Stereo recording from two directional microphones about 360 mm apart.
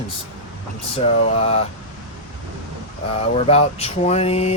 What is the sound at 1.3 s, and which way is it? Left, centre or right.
Speech, centre.